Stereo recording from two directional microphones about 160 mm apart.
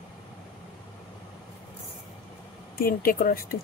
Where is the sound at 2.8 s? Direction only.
65° left (ahead or behind).